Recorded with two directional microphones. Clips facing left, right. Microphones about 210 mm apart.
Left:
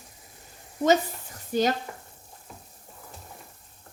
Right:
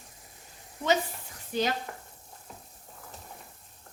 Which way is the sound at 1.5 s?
45° left (ahead or behind).